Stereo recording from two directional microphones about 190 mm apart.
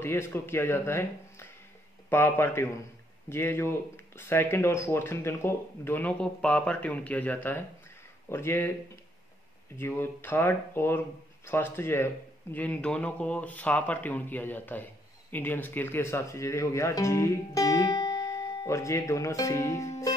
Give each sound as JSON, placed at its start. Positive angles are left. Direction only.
{"t": 0.0, "sound": "speech", "side_deg": 10}
{"t": 9.8, "sound": "speech", "side_deg": 10}